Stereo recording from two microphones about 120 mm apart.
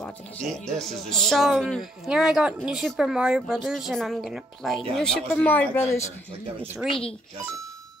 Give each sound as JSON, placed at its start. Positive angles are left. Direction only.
{"t": 0.0, "sound": "speech", "side_deg": 5}